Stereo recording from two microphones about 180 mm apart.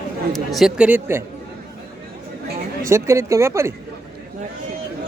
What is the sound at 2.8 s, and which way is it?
Speech, 15° right (ahead or behind).